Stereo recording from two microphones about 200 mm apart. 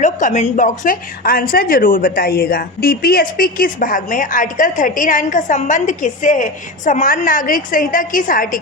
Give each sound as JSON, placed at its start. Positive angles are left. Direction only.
{"t": 0.0, "sound": "a woman's voice", "side_deg": 40}